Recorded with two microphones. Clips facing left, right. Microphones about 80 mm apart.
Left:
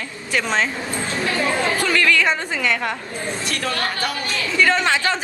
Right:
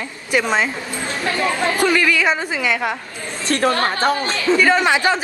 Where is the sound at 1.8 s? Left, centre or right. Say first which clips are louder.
Right 3 dB; centre.